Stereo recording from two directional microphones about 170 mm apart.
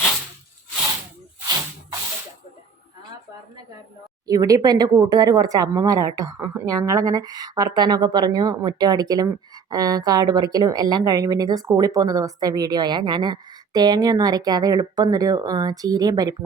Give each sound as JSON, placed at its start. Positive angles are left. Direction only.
{"t": 4.3, "sound": "speech", "side_deg": -20}